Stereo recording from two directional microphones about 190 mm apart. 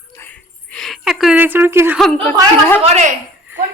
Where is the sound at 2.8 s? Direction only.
35° right (ahead or behind).